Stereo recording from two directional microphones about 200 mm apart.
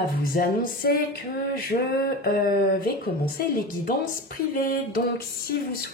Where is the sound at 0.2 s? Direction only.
45° left (ahead or behind).